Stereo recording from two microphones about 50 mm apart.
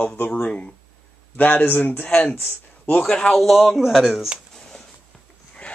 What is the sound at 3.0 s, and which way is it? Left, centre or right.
Speech, centre.